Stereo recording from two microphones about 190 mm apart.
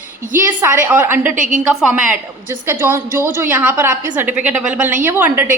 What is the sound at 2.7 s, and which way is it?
A woman's voice, 10° right (ahead or behind).